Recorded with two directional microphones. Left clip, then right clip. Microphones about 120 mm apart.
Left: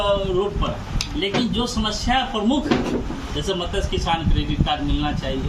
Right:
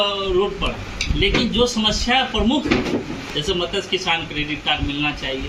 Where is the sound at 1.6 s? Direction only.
40° left (ahead or behind).